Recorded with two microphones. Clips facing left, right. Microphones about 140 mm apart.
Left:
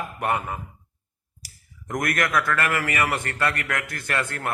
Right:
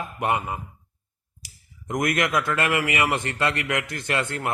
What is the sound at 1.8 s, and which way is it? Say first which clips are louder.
A man's voice: right 2 dB; 15° right (ahead or behind).